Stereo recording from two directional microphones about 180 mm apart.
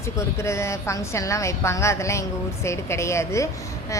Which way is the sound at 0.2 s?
15° left (ahead or behind).